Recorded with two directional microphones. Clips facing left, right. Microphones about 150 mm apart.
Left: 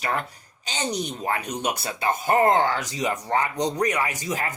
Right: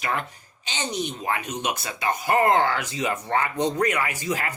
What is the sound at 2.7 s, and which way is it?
Speech, 40° left (ahead or behind).